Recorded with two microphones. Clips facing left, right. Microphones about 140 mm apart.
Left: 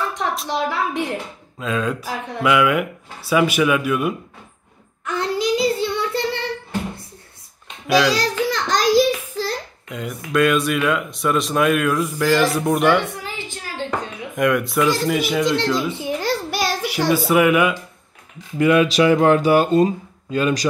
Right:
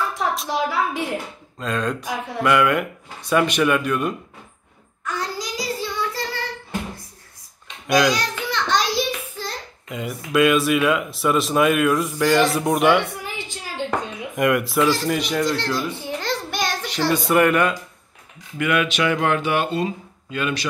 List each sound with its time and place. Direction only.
0.1 s a woman's voice: centre (ahead or behind)
5.0 s child singing: 25° left (ahead or behind)
7.8 s a child's voice: centre (ahead or behind)
8.1 s a sound: 35° left (ahead or behind)
9.8 s speech: centre (ahead or behind)
13.2 s a sound: 15° right (ahead or behind)
14.3 s speech: centre (ahead or behind)
15.4 s a child's voice: 20° left (ahead or behind)
18.6 s speech: 30° left (ahead or behind)